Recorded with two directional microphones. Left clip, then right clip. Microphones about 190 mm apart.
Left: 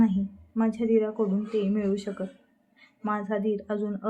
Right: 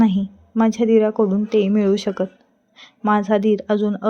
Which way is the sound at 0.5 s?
45° right (ahead or behind).